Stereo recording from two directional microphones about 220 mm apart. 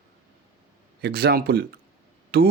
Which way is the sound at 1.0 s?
45° right (ahead or behind).